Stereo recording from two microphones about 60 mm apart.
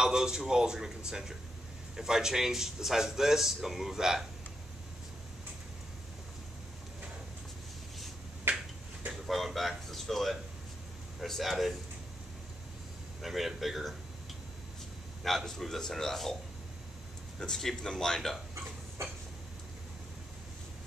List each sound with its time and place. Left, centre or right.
0.0 s speech: centre
8.5 s finger snapping: right
9.2 s a sound: centre
11.1 s a man's voice: centre
13.2 s speech: centre
15.2 s a man's voice: centre
17.4 s speech: centre